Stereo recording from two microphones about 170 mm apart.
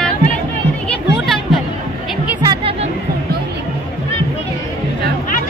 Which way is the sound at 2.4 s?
30° right (ahead or behind).